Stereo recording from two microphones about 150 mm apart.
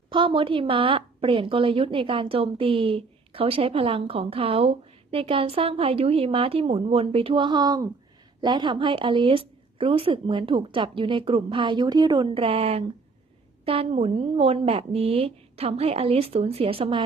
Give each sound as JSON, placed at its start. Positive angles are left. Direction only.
{"t": 0.1, "sound": "a woman's voice", "side_deg": -35}